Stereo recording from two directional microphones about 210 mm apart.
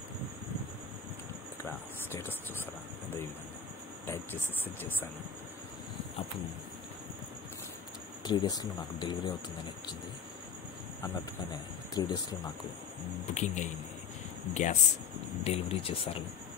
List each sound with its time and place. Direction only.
4.0 s speech: 10° left (ahead or behind)
8.2 s speech: 20° left (ahead or behind)
11.9 s speech: 20° left (ahead or behind)
13.3 s speech: 35° left (ahead or behind)